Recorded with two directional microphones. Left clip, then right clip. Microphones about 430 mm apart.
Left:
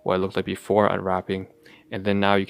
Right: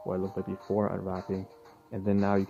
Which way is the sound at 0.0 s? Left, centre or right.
Centre.